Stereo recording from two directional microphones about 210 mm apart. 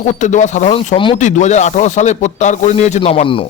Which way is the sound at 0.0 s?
35° left (ahead or behind).